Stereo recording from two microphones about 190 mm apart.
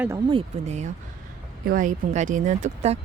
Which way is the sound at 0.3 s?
30° right (ahead or behind).